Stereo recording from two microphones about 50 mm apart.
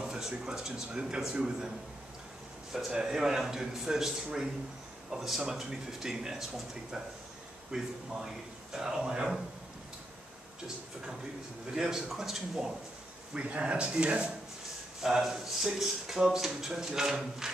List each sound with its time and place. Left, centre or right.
0.0 s speech: centre
2.7 s speech: centre
11.7 s speech: centre
13.3 s speech: right
15.0 s speech: centre